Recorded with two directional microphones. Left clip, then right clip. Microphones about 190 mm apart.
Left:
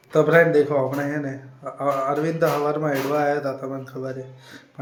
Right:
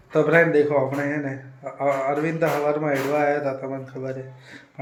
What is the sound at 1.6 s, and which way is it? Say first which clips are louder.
A man's voice: even; 15° left (ahead or behind).